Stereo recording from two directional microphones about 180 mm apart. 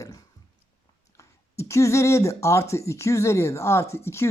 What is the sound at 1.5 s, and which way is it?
Speech, 15° left (ahead or behind).